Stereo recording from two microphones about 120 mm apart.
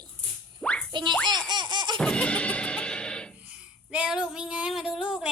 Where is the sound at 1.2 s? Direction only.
40° right (ahead or behind).